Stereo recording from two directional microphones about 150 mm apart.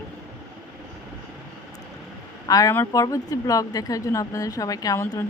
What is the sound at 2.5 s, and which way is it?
Speech, 20° left (ahead or behind).